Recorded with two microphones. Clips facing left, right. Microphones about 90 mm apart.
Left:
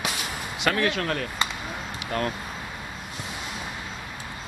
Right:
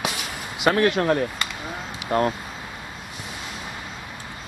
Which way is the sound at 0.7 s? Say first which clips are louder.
Right 6 dB; 25° right (ahead or behind).